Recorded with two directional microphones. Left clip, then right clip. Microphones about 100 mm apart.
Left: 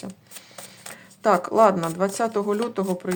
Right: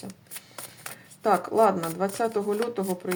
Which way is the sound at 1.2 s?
45° left (ahead or behind).